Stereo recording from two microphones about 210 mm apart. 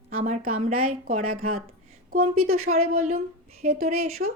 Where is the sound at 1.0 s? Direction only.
40° right (ahead or behind).